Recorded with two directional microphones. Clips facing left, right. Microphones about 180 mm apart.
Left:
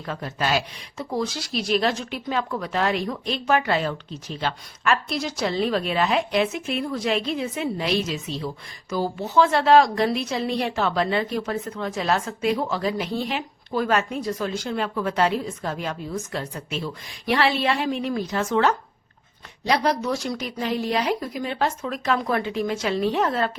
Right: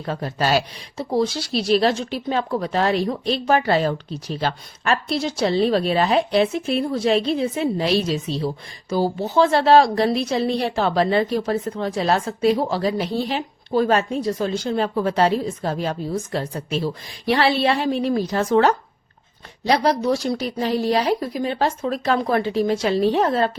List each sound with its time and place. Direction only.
0.0 s speech: 35° right (ahead or behind)